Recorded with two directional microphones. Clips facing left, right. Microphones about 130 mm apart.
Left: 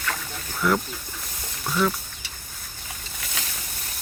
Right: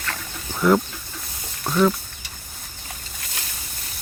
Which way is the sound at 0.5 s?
25° right (ahead or behind).